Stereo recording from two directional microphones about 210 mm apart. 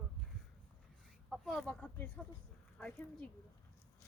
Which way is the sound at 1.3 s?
Centre (ahead or behind).